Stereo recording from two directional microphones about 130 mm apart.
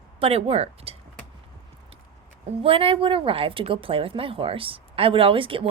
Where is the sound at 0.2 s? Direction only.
50° right (ahead or behind).